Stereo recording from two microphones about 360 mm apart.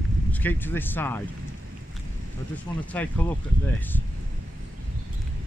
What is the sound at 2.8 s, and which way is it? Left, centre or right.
Speech, centre.